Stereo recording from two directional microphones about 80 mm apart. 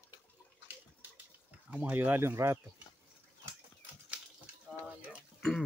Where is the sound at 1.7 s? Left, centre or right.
Right.